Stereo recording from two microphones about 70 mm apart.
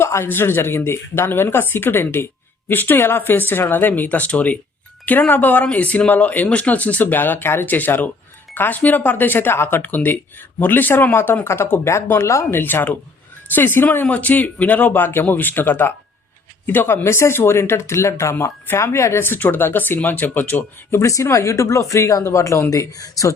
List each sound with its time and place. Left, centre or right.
0.0 s speech: left
12.5 s speech: left
21.0 s speech: left
22.7 s speech: left